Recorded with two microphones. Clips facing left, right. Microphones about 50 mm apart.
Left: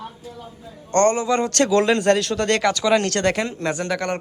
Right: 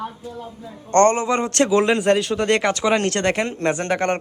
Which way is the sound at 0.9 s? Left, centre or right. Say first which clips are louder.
Right 2 dB; right.